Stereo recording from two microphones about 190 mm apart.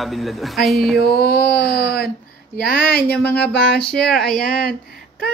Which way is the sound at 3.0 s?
10° left (ahead or behind).